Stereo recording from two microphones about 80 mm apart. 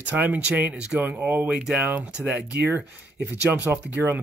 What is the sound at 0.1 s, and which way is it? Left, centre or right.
Speech, right.